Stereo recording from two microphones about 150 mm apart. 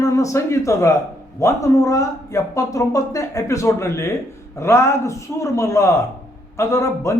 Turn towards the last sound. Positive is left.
turn(degrees=20)  # may be behind; listen again after turning